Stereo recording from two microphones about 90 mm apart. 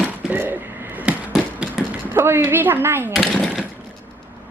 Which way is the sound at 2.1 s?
25° right (ahead or behind).